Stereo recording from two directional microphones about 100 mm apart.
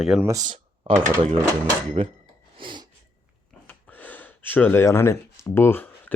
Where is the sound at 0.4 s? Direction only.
60° right (ahead or behind).